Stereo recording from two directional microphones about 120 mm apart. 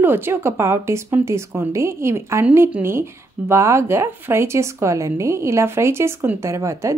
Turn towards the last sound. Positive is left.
turn(degrees=-25)  # may be behind; listen again after turning